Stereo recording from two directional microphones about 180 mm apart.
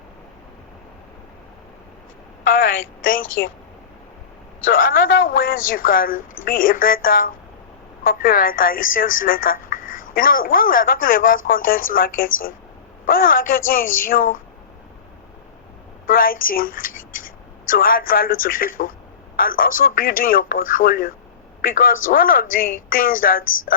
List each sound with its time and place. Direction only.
2.5 s a woman's voice: 50° left (ahead or behind)
3.2 s speech: 90° left
4.7 s a woman's voice: 50° left (ahead or behind)
16.0 s a woman's voice: 50° left (ahead or behind)